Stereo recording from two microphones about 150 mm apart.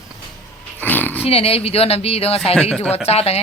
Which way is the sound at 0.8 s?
10° left (ahead or behind).